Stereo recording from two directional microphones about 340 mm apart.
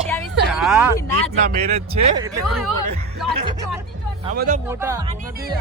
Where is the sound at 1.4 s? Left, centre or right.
Right.